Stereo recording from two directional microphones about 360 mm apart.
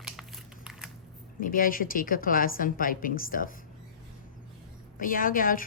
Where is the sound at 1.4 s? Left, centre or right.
Left.